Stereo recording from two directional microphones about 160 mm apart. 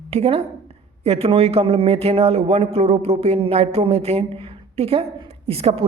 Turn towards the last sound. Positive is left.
turn(degrees=-40)  # may be behind; listen again after turning